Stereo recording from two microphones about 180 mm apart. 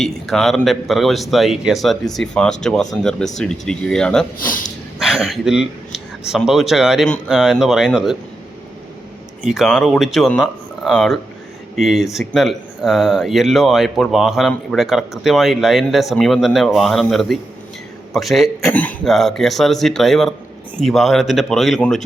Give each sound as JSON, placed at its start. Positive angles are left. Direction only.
{"t": 0.0, "sound": "speech", "side_deg": 0}
{"t": 4.4, "sound": "speech", "side_deg": 50}
{"t": 4.9, "sound": "speech", "side_deg": 0}
{"t": 9.4, "sound": "speech", "side_deg": 0}